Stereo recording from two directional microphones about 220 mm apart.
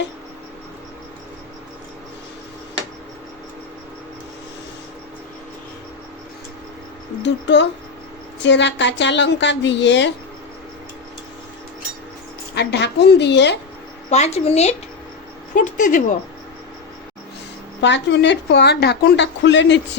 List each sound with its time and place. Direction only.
7.2 s a woman's voice: 55° left (ahead or behind)
12.5 s a woman's voice: 50° left (ahead or behind)
14.1 s a woman's voice: 30° left (ahead or behind)
17.7 s a woman's voice: 50° left (ahead or behind)